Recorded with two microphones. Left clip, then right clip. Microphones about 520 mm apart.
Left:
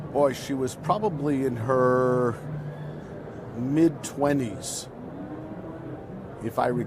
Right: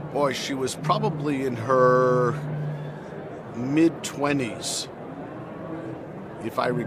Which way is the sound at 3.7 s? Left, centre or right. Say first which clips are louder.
Right 1 dB; left.